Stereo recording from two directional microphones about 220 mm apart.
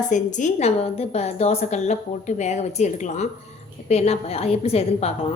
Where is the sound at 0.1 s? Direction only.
35° left (ahead or behind).